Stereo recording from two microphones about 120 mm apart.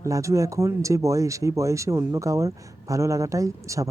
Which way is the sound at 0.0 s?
25° right (ahead or behind).